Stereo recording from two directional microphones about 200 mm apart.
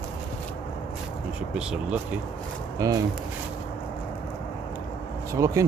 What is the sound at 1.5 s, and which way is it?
Speech, 5° right (ahead or behind).